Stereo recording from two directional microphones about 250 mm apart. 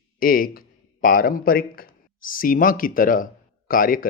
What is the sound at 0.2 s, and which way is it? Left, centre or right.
A man's voice, left.